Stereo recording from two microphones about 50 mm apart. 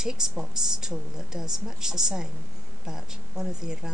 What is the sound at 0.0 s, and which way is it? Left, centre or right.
Speech, centre.